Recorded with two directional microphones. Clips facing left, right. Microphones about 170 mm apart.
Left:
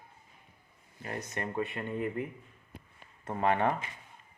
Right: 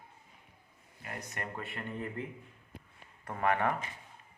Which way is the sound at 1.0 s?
25° left (ahead or behind).